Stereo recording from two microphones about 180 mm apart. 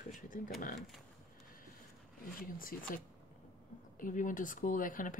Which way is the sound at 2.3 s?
50° left (ahead or behind).